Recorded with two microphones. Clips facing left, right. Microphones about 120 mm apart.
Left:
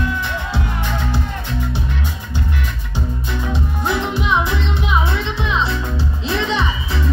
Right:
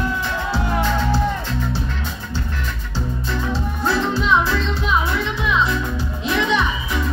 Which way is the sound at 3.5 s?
15° left (ahead or behind).